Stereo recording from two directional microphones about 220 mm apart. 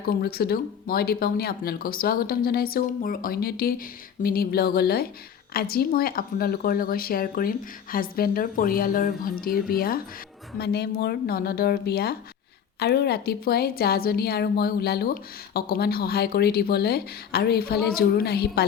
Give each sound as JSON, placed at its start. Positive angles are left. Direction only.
{"t": 0.0, "sound": "speech", "side_deg": 45}